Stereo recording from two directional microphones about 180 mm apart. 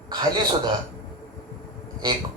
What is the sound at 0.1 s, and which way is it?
Speech, 25° right (ahead or behind).